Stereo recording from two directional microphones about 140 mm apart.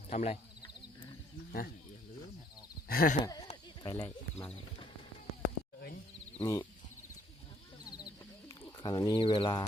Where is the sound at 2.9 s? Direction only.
90° left.